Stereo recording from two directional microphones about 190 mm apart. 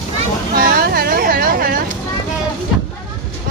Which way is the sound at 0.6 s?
50° right (ahead or behind).